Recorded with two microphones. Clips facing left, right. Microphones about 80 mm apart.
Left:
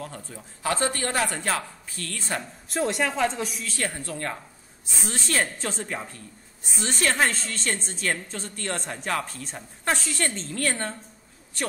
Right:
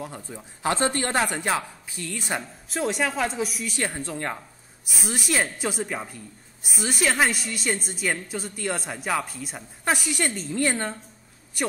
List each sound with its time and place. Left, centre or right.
0.0 s a woman's voice: centre
2.7 s speech: centre
3.7 s speech: right
4.9 s a woman's voice: centre